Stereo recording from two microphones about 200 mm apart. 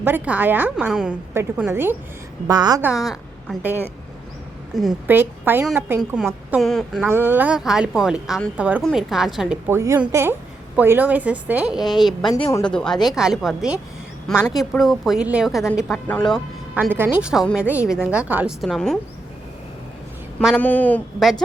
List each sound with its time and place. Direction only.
0.0 s a woman's voice: 10° right (ahead or behind)
3.0 s a woman's voice: centre (ahead or behind)
12.3 s speech: 15° left (ahead or behind)
12.6 s a woman's voice: 5° left (ahead or behind)
16.7 s a woman's voice: 10° right (ahead or behind)
20.4 s speech: 5° left (ahead or behind)